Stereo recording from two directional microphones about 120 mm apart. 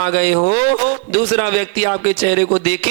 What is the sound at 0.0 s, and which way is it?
A man's voice, 25° left (ahead or behind).